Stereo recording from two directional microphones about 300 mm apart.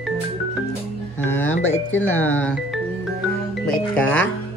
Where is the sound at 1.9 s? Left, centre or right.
Centre.